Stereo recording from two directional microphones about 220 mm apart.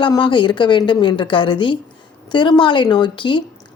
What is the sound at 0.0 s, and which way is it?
Speech, 20° left (ahead or behind).